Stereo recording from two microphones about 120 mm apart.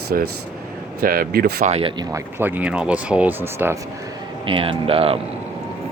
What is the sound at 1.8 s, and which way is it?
Speech, 45° right (ahead or behind).